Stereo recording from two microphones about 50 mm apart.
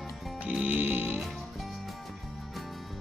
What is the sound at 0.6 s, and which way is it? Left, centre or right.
Music, right.